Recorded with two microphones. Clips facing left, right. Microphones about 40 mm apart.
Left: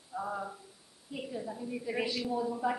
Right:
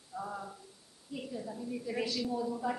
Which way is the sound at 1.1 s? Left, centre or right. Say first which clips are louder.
Left 2 dB; centre.